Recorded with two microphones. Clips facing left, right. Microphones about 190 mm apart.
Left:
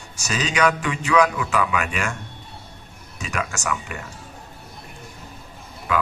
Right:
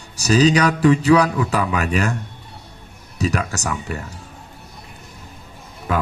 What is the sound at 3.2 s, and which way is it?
Speech, 35° right (ahead or behind).